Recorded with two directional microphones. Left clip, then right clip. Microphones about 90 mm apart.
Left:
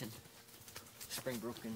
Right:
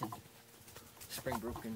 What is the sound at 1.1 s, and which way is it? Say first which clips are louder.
Speech: right 3 dB; 5° left (ahead or behind).